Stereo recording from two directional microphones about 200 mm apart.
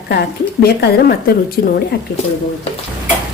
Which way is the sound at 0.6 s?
50° left (ahead or behind).